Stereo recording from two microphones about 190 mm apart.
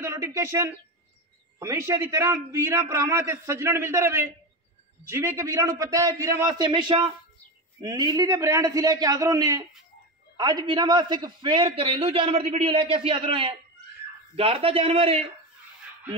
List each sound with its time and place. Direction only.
0.0 s a man's voice: 15° right (ahead or behind); by 15.3 s 30° right (ahead or behind)